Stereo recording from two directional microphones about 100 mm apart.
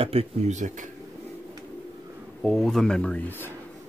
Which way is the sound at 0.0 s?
80° right.